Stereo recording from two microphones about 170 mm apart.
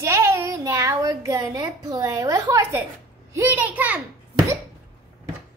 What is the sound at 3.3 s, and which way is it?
Speech, 10° right (ahead or behind).